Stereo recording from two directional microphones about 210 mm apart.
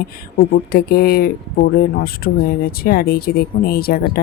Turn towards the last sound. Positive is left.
turn(degrees=45)  # may be behind; listen again after turning